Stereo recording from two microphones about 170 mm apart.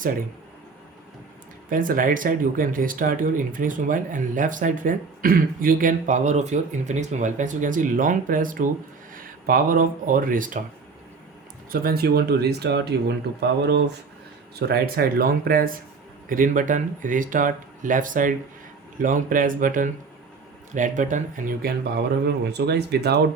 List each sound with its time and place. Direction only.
1.7 s speech: 55° right (ahead or behind)
11.7 s speech: 60° right (ahead or behind); by 13.9 s 80° right
14.5 s speech: 65° right (ahead or behind)